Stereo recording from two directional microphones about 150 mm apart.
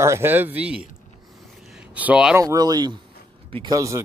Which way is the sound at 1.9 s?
10° right (ahead or behind).